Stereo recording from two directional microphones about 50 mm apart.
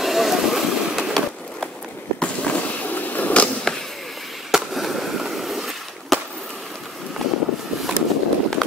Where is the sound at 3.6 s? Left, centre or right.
Centre.